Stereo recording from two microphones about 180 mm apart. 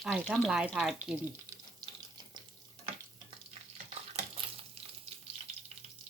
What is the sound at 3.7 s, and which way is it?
Stir, 40° right (ahead or behind).